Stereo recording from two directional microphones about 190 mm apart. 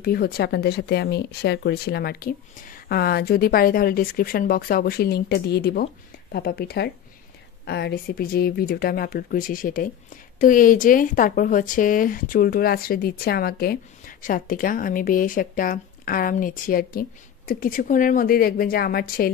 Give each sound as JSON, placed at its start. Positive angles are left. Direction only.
{"t": 0.0, "sound": "speech", "side_deg": 55}